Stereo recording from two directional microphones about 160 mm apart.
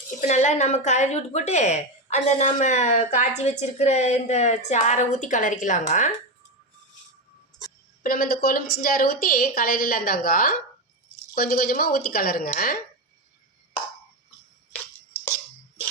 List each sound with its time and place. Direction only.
0.2 s a woman's voice: 50° left (ahead or behind)
8.0 s a woman's voice: 65° left (ahead or behind)